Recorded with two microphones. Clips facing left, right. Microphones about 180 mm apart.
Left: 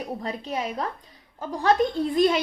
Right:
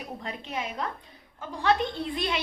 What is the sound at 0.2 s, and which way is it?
A woman's voice, 35° left (ahead or behind).